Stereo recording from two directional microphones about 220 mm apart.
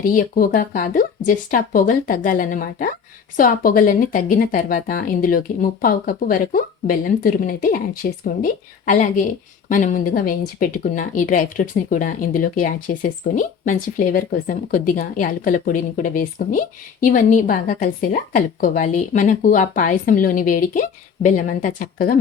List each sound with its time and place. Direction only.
0.0 s a woman's voice: 40° left (ahead or behind)